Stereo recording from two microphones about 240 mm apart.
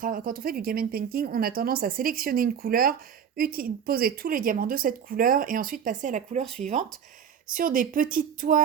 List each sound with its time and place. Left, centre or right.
0.0 s a woman's voice: right